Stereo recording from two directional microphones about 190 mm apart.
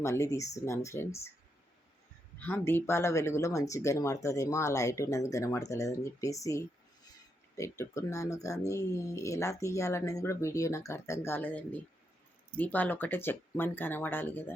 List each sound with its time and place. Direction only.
0.0 s speech: 15° left (ahead or behind)
2.4 s speech: 10° left (ahead or behind)